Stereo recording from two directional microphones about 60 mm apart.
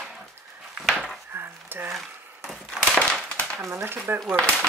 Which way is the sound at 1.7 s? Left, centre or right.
Right.